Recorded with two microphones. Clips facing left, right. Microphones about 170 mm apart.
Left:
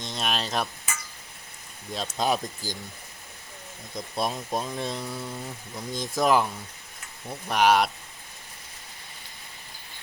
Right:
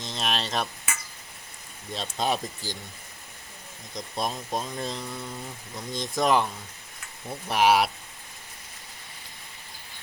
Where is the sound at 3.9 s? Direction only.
5° left (ahead or behind).